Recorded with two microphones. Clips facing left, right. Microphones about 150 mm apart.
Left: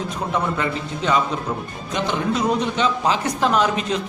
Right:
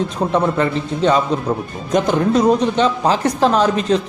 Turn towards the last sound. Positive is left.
turn(degrees=-35)  # may be behind; listen again after turning